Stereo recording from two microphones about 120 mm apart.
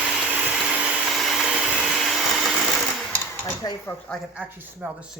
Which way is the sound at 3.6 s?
30° left (ahead or behind).